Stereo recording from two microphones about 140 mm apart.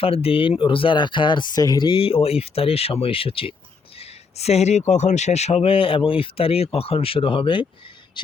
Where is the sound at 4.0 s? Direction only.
50° left (ahead or behind).